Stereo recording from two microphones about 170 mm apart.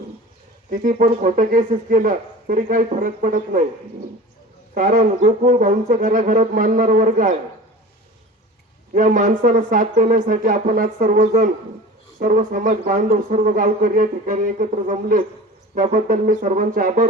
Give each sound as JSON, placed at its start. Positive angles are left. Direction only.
{"t": 0.7, "sound": "a man's voice", "side_deg": -50}
{"t": 4.7, "sound": "a man's voice", "side_deg": -50}
{"t": 8.9, "sound": "a man's voice", "side_deg": -50}
{"t": 11.2, "sound": "a man's voice", "side_deg": -40}